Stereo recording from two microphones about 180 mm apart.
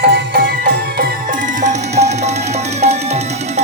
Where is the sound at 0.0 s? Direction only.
60° right (ahead or behind).